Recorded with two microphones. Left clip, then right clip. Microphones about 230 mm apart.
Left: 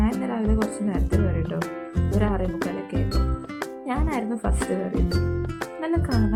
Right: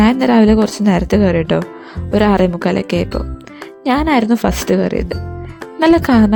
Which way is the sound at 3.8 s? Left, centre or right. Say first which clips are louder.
Right 15 dB; right.